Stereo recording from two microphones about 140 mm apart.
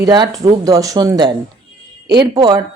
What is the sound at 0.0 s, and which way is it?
Speech, 30° right (ahead or behind).